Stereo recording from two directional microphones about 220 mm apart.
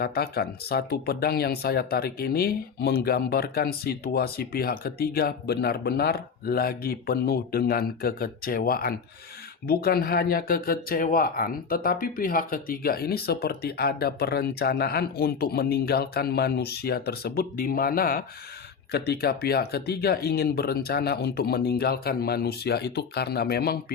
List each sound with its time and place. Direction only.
0.0 s speech: 45° left (ahead or behind)